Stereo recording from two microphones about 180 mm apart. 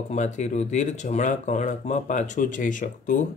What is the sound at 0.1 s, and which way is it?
Speech, 40° left (ahead or behind).